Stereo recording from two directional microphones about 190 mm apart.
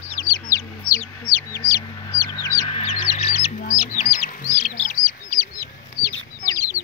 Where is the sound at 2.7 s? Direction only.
35° left (ahead or behind).